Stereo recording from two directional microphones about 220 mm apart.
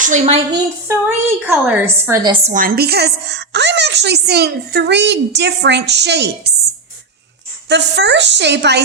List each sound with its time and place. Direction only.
0.0 s a woman's voice: 30° right (ahead or behind)
0.9 s a woman's voice: 10° right (ahead or behind)
2.5 s a woman's voice: 40° right (ahead or behind)
7.7 s a woman's voice: 50° right (ahead or behind)